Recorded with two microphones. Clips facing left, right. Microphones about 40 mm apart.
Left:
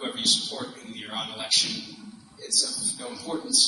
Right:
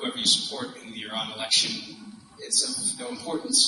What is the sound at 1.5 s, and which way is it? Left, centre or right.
A man's voice, right.